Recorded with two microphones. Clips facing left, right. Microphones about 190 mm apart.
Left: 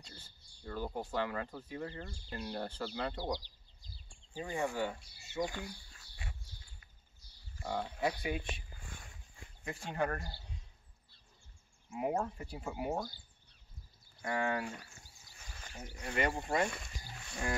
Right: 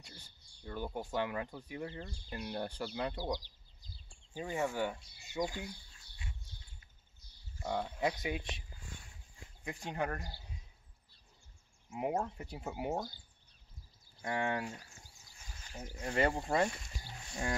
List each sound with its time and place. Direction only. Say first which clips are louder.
0.0 s speech: left 1 dB; 15° right (ahead or behind)
5.5 s bird: even; 65° left (ahead or behind)
8.0 s speech: left 2 dB; 20° right (ahead or behind)
8.7 s a sound: even; 55° left (ahead or behind)
9.7 s speech: left 2 dB; 15° right (ahead or behind)
11.9 s speech: even; 20° right (ahead or behind)
14.2 s speech: left 1 dB; 25° right (ahead or behind)
16.1 s speech: right 2 dB; 30° right (ahead or behind)
16.7 s roaring cats: left 1 dB; 60° left (ahead or behind)